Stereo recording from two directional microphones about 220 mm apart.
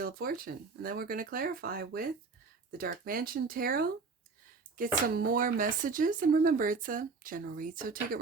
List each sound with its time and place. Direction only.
0.0 s speech: 40° right (ahead or behind)